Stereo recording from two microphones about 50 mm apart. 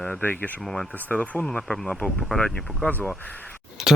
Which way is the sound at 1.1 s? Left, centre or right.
Left.